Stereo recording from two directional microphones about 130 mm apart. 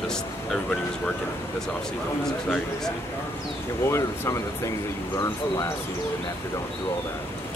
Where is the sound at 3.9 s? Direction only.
25° left (ahead or behind).